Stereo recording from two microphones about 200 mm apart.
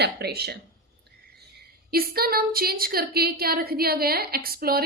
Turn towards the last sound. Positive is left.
turn(degrees=-50)  # may be behind; listen again after turning